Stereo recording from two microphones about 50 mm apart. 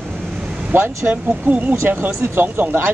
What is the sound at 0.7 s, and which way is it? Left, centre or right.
Speech, right.